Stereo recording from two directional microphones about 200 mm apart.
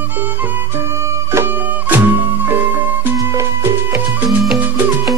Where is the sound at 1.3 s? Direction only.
10° right (ahead or behind).